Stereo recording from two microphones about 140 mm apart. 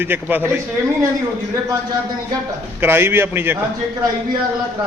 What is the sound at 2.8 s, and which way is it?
Speech, 15° right (ahead or behind).